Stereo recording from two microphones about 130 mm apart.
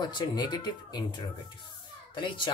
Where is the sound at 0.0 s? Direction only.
30° left (ahead or behind).